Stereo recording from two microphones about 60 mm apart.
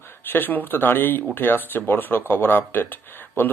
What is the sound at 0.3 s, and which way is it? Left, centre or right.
Speech, left.